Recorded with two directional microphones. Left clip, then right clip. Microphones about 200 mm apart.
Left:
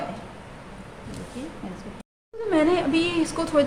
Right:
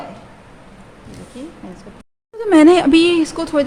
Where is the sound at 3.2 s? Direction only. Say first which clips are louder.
Right 4 dB; 35° right (ahead or behind).